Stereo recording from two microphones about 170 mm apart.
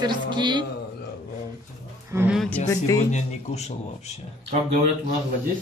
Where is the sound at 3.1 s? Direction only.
40° left (ahead or behind).